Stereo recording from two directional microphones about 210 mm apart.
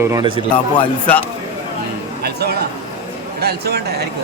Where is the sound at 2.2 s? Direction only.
50° right (ahead or behind).